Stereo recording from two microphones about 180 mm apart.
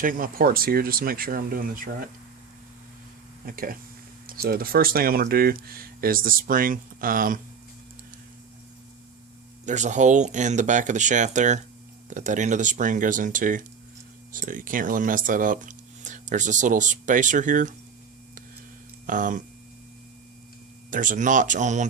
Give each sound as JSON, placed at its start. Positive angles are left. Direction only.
{"t": 0.0, "sound": "speech", "side_deg": -50}
{"t": 3.4, "sound": "speech", "side_deg": -55}
{"t": 9.6, "sound": "speech", "side_deg": -40}
{"t": 19.0, "sound": "speech", "side_deg": -45}
{"t": 20.9, "sound": "speech", "side_deg": -45}